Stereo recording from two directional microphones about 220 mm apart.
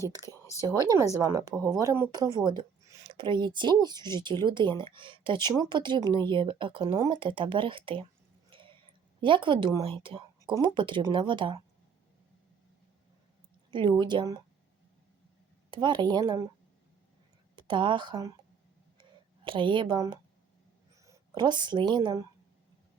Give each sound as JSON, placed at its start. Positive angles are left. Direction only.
{"t": 0.4, "sound": "speech", "side_deg": 15}
{"t": 0.7, "sound": "speech", "side_deg": -15}
{"t": 8.4, "sound": "a sound", "side_deg": -25}
{"t": 9.2, "sound": "speech", "side_deg": -20}
{"t": 13.7, "sound": "speech", "side_deg": -20}
{"t": 15.7, "sound": "speech", "side_deg": -20}
{"t": 17.6, "sound": "speech", "side_deg": -20}
{"t": 19.5, "sound": "speech", "side_deg": -20}